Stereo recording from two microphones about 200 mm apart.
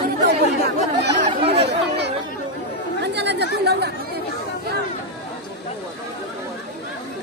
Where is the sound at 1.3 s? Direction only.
25° right (ahead or behind).